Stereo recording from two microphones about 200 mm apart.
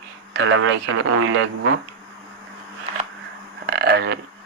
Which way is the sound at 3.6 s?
55° right (ahead or behind).